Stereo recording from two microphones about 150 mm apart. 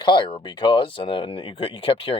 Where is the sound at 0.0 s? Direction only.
30° left (ahead or behind).